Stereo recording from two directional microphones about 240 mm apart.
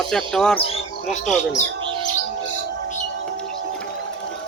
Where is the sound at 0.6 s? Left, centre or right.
Left.